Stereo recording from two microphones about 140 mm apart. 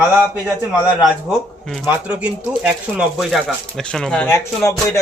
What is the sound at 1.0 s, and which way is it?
Speech, centre (ahead or behind).